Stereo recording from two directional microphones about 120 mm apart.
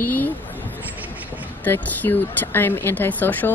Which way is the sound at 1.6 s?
15° left (ahead or behind).